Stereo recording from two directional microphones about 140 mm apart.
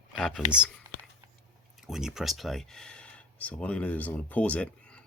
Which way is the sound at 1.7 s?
5° right (ahead or behind).